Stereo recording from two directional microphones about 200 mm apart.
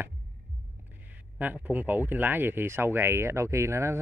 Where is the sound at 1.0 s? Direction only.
10° right (ahead or behind).